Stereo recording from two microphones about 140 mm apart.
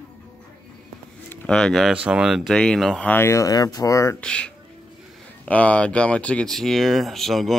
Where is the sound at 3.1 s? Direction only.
20° left (ahead or behind).